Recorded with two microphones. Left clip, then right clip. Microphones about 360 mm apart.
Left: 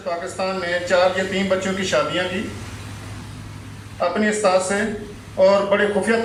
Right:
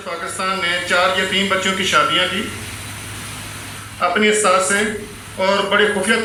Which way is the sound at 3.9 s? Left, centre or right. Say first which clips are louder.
Right 5 dB; left.